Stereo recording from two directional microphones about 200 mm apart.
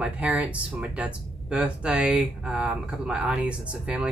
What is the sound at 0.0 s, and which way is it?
Speech, 5° right (ahead or behind).